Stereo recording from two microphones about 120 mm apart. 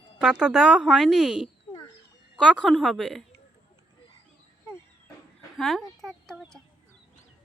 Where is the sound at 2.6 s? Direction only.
Centre (ahead or behind).